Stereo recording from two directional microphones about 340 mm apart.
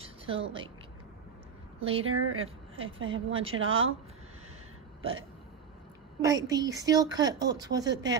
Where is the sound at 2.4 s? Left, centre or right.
Centre.